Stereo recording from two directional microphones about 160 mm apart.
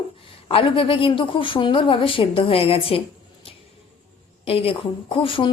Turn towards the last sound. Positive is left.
turn(degrees=35)  # may be behind; listen again after turning